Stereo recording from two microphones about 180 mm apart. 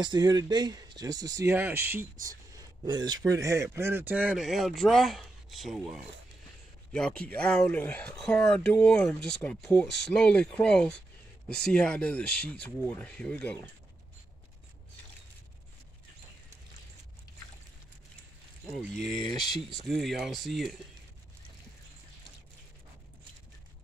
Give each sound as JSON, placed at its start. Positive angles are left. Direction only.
{"t": 0.0, "sound": "speech", "side_deg": -25}
{"t": 2.8, "sound": "speech", "side_deg": -25}
{"t": 19.4, "sound": "speech", "side_deg": 0}